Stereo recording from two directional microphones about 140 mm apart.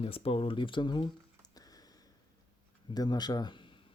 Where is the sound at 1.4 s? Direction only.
25° left (ahead or behind).